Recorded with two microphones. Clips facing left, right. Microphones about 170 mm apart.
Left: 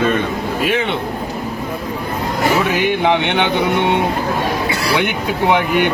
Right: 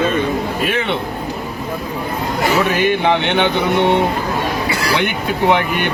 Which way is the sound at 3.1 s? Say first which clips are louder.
Right 1 dB; 15° left (ahead or behind).